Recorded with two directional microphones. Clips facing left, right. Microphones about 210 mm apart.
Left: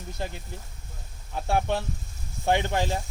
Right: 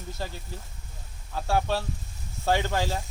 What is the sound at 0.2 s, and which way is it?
Speech, 20° left (ahead or behind).